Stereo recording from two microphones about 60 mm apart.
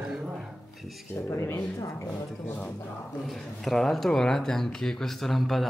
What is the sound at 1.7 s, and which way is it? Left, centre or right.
Speech, left.